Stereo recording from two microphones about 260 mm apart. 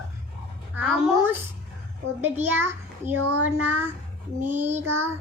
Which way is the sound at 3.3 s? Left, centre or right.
Right.